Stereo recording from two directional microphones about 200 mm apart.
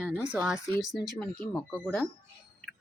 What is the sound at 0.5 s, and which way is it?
Speech, 15° left (ahead or behind).